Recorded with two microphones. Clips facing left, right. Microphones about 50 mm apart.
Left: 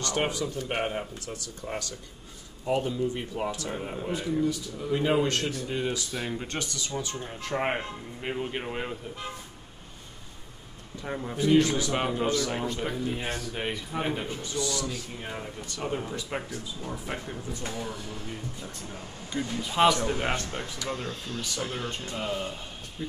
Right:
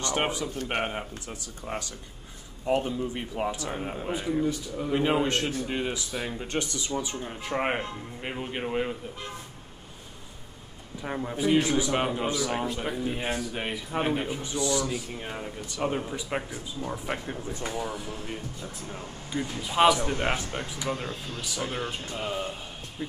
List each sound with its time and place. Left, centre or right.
0.0 s speech: right
3.2 s a man's voice: centre
6.4 s speech: right
7.6 s speech: centre
11.0 s a man's voice: centre
18.8 s speech: centre